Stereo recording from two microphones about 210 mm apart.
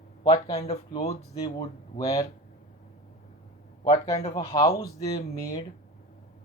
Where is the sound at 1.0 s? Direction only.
20° left (ahead or behind).